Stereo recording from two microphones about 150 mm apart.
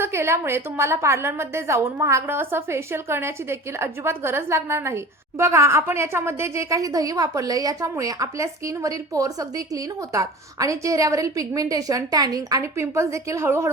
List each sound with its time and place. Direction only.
0.0 s a woman's voice: 15° right (ahead or behind)